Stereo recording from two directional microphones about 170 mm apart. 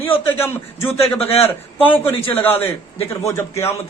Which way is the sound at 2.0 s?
10° left (ahead or behind).